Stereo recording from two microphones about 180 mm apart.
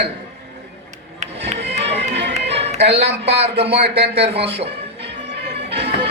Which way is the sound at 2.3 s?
35° right (ahead or behind).